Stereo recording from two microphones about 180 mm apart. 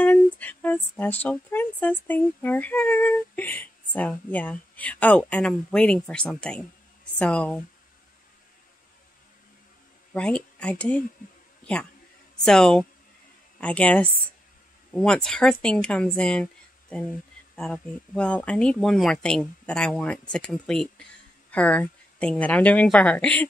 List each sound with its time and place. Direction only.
0.0 s speech: 10° left (ahead or behind)
10.1 s speech: 5° left (ahead or behind)
11.2 s a sound: 50° left (ahead or behind)
11.6 s a man's voice: 5° left (ahead or behind)
17.6 s speech: 5° left (ahead or behind)